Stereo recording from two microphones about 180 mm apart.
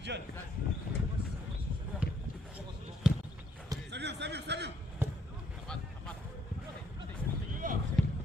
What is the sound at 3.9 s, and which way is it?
Speech, 70° right (ahead or behind).